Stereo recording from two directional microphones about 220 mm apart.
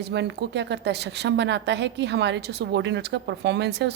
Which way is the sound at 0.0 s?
50° right (ahead or behind).